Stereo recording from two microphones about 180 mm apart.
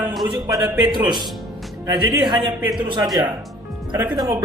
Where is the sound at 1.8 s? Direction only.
20° right (ahead or behind).